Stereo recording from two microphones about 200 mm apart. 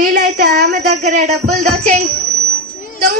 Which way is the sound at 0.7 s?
35° right (ahead or behind).